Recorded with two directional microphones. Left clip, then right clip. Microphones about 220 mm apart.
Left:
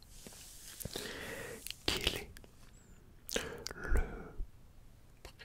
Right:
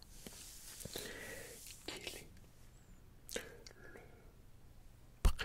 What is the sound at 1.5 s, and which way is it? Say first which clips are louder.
Whispering: left 12 dB; 40° left (ahead or behind).